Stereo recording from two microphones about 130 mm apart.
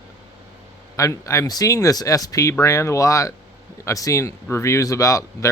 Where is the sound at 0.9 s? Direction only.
25° left (ahead or behind).